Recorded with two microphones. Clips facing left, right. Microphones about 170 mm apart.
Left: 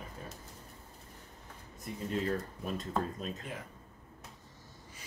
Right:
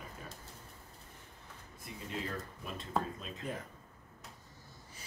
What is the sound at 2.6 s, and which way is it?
Speech, 40° left (ahead or behind).